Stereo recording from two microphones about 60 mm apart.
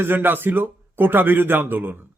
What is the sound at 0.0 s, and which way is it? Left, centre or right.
A man's voice, right.